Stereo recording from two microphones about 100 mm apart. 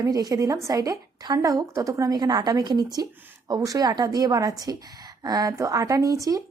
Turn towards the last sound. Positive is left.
turn(degrees=-35)  # may be behind; listen again after turning